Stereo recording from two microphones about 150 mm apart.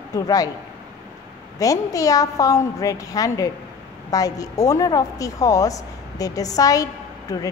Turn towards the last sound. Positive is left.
turn(degrees=25)  # may be behind; listen again after turning